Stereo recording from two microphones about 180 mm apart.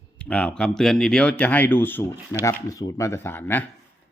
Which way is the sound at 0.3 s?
5° left (ahead or behind).